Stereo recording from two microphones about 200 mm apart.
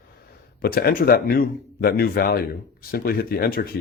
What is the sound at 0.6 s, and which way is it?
Speech, 50° left (ahead or behind).